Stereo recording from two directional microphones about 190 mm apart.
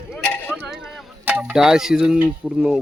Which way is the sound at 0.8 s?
5° right (ahead or behind).